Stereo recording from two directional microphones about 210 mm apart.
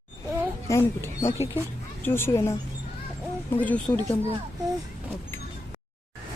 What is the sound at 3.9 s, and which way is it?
Speech, 15° left (ahead or behind).